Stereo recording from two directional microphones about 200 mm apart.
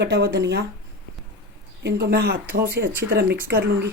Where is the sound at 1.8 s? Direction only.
55° right (ahead or behind).